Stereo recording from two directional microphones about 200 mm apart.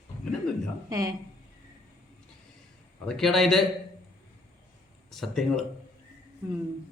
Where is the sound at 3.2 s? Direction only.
Centre (ahead or behind).